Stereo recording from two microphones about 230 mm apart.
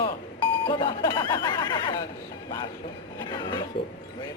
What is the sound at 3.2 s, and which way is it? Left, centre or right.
Speech, centre.